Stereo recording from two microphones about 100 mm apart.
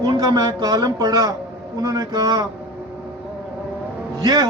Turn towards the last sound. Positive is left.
turn(degrees=-40)  # may be behind; listen again after turning